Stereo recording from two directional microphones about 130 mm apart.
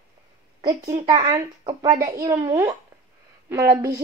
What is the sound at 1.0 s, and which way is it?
A woman's voice, 35° right (ahead or behind).